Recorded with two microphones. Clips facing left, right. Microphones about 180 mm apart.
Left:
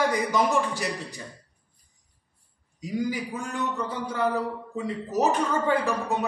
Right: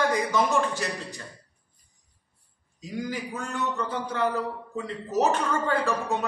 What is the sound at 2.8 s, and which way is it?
A man's voice, 10° left (ahead or behind).